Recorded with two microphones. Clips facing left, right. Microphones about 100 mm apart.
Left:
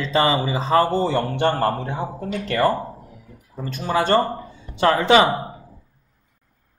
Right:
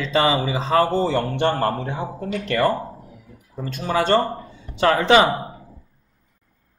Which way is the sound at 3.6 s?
30° left (ahead or behind).